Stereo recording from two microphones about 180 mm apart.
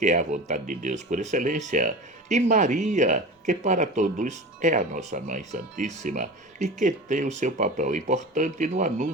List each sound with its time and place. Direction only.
0.0 s speech: 45° right (ahead or behind)